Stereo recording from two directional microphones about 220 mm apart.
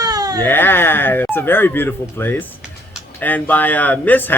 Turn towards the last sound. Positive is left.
turn(degrees=10)  # may be behind; listen again after turning